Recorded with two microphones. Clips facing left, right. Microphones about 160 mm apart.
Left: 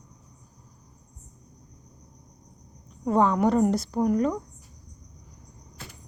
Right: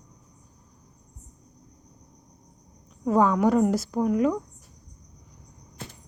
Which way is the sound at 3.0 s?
5° right (ahead or behind).